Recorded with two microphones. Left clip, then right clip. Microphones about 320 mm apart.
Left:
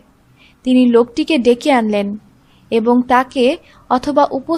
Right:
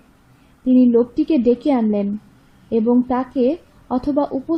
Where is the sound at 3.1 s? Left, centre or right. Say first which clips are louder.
Left 6 dB; left.